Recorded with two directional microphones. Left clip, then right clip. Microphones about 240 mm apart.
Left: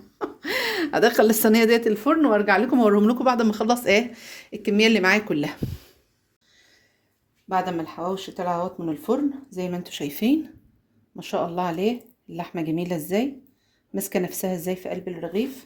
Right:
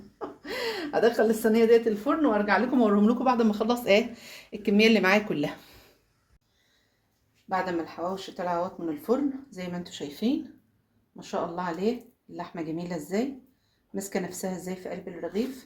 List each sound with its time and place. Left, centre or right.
0.2 s a woman's voice: left
7.4 s speech: left